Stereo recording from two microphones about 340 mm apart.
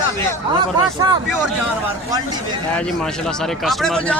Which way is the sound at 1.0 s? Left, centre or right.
Centre.